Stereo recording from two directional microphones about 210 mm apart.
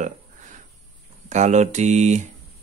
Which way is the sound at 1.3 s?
35° right (ahead or behind).